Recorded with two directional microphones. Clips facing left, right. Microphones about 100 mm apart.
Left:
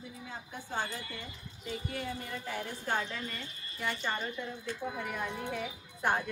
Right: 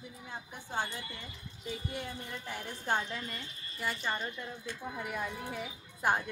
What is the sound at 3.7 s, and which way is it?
A woman's voice, 5° right (ahead or behind).